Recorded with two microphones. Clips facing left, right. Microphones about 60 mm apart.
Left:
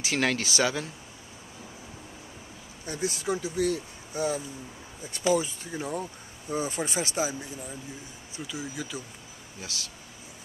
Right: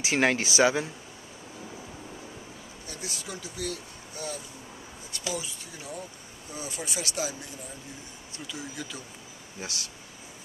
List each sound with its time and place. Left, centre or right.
0.0 s speech: centre
2.9 s speech: left
5.2 s speech: left
8.5 s speech: centre